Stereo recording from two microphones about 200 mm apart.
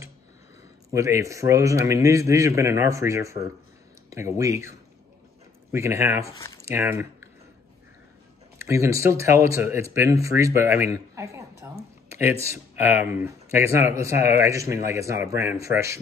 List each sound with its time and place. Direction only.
0.9 s speech: 15° right (ahead or behind)
6.3 s speech: 15° left (ahead or behind)
6.6 s speech: 10° right (ahead or behind)
8.5 s speech: 15° right (ahead or behind)